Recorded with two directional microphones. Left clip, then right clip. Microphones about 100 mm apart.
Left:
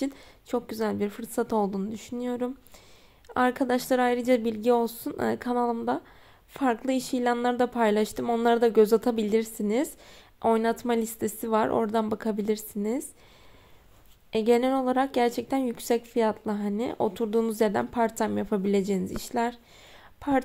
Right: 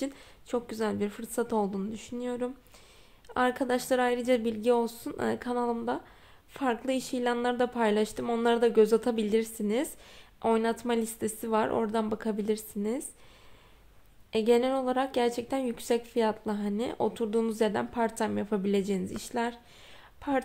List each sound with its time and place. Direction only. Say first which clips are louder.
0.0 s a woman's voice: left 3 dB; 30° left (ahead or behind)
14.3 s a woman's voice: left 2 dB; 40° left (ahead or behind)